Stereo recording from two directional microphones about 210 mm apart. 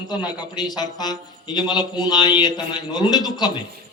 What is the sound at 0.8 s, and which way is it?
A man's voice, 20° left (ahead or behind).